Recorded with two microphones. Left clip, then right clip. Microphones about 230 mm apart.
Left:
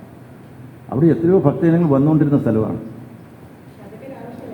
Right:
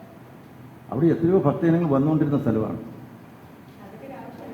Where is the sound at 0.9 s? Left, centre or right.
Left.